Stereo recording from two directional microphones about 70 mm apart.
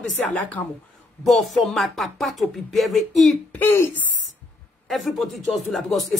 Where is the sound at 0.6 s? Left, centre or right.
Left.